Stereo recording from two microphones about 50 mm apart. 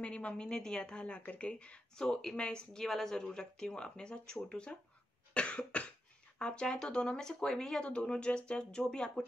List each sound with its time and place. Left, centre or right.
0.0 s a woman's voice: left
5.3 s cough: left
6.3 s speech: centre